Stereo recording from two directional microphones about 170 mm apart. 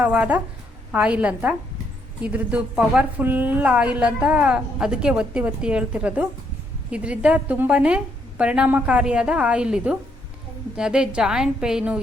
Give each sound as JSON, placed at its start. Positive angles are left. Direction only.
{"t": 0.0, "sound": "a woman's voice", "side_deg": -10}